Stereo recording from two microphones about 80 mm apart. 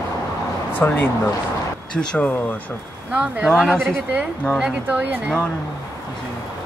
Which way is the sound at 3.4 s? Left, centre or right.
Centre.